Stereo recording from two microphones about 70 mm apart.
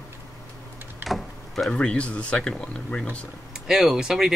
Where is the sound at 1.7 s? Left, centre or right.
Centre.